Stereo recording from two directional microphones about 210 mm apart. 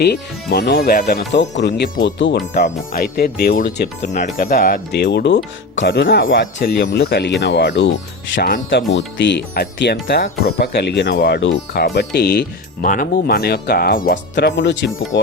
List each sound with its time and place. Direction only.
0.0 s speech: 50° left (ahead or behind)
1.3 s speech: 55° left (ahead or behind)
2.5 s speech: 35° left (ahead or behind); by 7.9 s 60° left (ahead or behind)
8.4 s speech: 45° left (ahead or behind)